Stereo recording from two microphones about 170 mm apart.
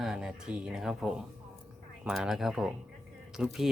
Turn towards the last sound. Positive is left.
turn(degrees=-5)  # may be behind; listen again after turning